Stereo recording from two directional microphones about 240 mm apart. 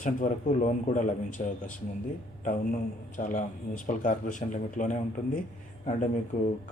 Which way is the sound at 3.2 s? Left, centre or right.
Left.